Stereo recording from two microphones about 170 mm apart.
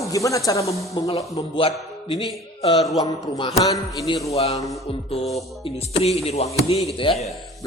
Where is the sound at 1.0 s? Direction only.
35° left (ahead or behind).